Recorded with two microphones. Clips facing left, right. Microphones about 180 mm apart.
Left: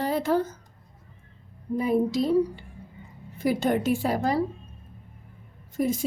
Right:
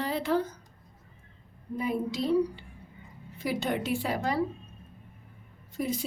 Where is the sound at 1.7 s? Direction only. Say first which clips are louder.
Left 7 dB; 35° left (ahead or behind).